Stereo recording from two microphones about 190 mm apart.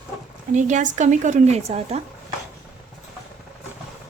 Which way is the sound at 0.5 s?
40° right (ahead or behind).